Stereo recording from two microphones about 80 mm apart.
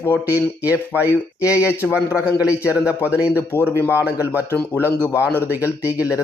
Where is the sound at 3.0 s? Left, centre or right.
Centre.